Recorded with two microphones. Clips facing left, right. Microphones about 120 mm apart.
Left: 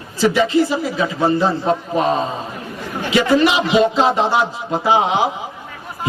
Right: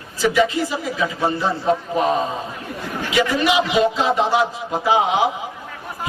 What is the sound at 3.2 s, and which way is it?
A man's voice, 30° left (ahead or behind).